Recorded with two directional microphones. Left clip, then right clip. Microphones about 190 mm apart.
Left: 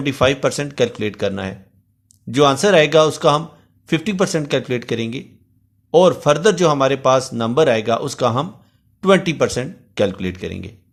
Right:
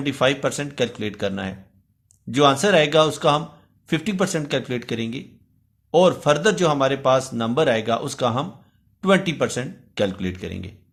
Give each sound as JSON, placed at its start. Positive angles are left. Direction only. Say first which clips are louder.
{"t": 0.0, "sound": "a man's voice", "louder": "left 4 dB", "side_deg": 25}